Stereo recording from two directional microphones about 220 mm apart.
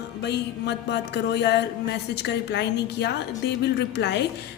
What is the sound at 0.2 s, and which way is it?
A woman's voice, 50° left (ahead or behind).